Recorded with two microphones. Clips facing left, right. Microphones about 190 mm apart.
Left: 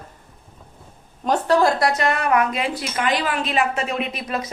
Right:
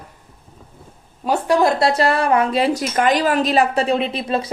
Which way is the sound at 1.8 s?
30° right (ahead or behind).